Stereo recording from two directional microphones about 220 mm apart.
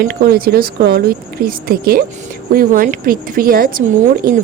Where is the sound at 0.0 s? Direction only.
40° right (ahead or behind).